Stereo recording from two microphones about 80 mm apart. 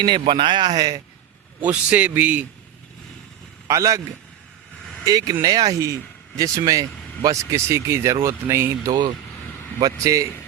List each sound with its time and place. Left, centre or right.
0.0 s speech: right
1.6 s a man's voice: centre
3.7 s a man's voice: right
5.0 s speech: right
8.9 s speech: right
9.8 s a man's voice: right